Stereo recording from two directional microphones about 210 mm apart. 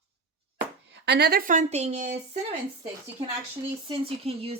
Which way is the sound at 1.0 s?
50° right (ahead or behind).